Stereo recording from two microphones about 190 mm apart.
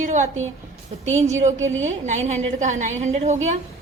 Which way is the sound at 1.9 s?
40° right (ahead or behind).